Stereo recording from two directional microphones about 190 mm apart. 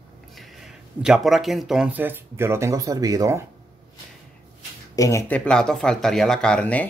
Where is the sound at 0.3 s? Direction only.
Centre (ahead or behind); by 3.4 s 15° right (ahead or behind).